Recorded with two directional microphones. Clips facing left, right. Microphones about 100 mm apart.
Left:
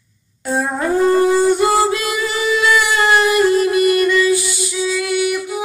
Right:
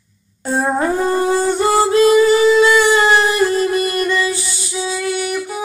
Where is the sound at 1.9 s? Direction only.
35° right (ahead or behind).